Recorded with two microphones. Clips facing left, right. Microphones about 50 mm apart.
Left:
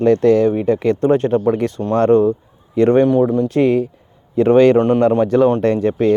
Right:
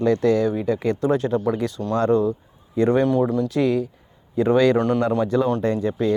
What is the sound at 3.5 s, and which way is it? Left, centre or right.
Speech, left.